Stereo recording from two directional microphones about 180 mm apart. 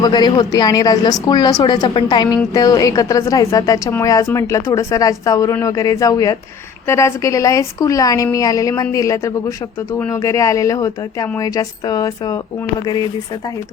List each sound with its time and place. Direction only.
0.0 s speech: 25° left (ahead or behind)